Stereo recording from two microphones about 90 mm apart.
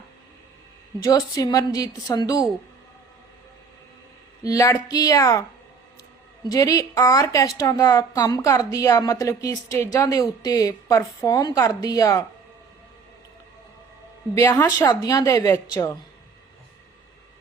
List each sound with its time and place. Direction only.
1.4 s a woman's voice: 40° left (ahead or behind)
4.4 s a woman's voice: 40° left (ahead or behind)
6.5 s a woman's voice: 40° left (ahead or behind)
14.3 s a woman's voice: 35° left (ahead or behind)